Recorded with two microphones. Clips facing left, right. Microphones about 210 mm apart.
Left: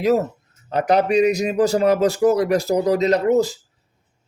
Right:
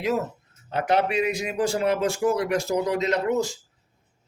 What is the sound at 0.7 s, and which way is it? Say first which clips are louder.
Speech: left 6 dB; 40° left (ahead or behind).